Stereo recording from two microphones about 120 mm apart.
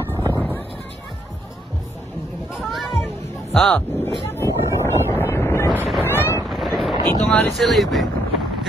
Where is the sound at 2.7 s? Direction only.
Centre (ahead or behind).